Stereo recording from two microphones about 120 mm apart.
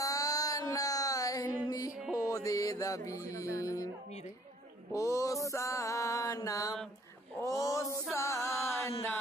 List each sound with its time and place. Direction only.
0.0 s music: 30° left (ahead or behind)
2.3 s mantra: 30° left (ahead or behind)
3.3 s music: 25° left (ahead or behind)
4.9 s mantra: 25° left (ahead or behind)
7.3 s a sound: 25° left (ahead or behind)